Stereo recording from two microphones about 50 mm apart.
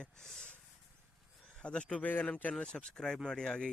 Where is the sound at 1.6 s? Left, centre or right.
Left.